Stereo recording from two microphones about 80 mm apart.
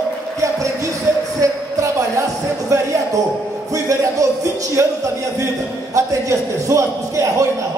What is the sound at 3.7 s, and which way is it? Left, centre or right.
Music, right.